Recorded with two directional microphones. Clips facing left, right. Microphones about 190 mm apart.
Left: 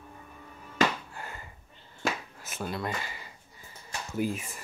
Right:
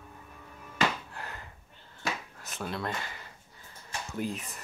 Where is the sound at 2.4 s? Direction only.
5° left (ahead or behind).